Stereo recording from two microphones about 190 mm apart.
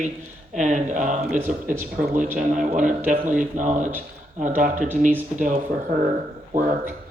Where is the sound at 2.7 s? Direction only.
40° right (ahead or behind).